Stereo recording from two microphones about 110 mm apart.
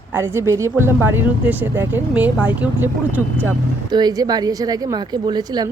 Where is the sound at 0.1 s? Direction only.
20° right (ahead or behind).